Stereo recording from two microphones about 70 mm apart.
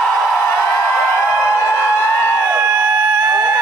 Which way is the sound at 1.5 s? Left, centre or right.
Left.